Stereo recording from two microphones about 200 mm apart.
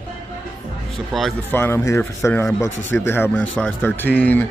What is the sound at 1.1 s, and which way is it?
A man's voice, 5° left (ahead or behind).